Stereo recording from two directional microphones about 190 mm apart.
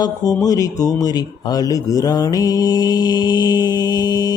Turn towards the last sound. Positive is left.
turn(degrees=20)  # may be behind; listen again after turning